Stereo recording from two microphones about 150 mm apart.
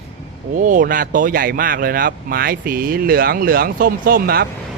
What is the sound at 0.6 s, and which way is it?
Speech, 60° right (ahead or behind).